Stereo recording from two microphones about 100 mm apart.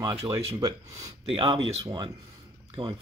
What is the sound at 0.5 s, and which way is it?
Speech, 35° right (ahead or behind).